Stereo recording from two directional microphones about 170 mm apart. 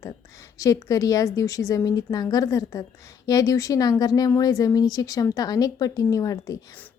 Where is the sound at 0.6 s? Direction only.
20° left (ahead or behind).